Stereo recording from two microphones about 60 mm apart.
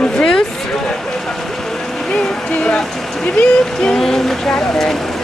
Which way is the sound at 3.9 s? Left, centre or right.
Centre.